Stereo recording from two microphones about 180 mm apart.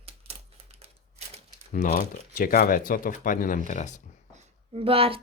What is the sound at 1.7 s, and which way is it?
Speech, 45° left (ahead or behind).